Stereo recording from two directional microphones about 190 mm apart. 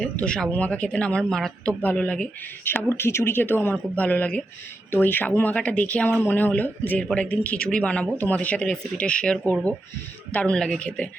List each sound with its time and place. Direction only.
0.0 s speech: 5° left (ahead or behind)